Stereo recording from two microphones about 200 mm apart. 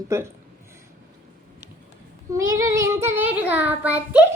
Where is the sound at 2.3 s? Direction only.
15° right (ahead or behind).